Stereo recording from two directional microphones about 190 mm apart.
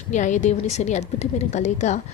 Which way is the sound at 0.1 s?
40° left (ahead or behind).